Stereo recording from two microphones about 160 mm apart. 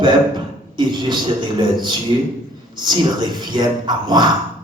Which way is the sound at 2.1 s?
30° right (ahead or behind).